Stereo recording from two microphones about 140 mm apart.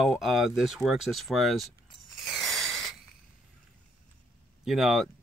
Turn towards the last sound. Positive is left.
turn(degrees=0)  # may be behind; listen again after turning